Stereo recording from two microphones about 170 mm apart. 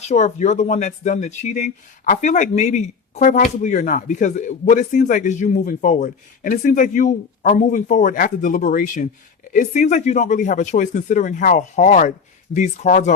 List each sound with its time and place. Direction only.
0.1 s speech: 40° left (ahead or behind)